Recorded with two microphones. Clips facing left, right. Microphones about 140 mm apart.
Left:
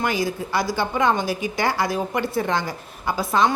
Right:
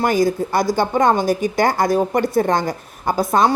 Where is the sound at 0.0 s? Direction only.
45° right (ahead or behind).